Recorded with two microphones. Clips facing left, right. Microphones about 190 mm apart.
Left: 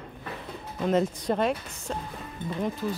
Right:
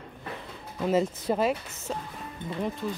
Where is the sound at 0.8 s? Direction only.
5° right (ahead or behind).